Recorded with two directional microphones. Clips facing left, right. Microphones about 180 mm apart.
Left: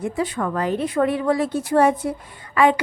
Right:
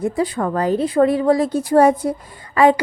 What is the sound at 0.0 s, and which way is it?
A woman's voice, 35° right (ahead or behind).